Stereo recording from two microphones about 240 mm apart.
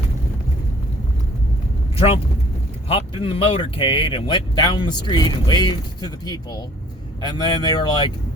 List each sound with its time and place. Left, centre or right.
2.9 s speech: left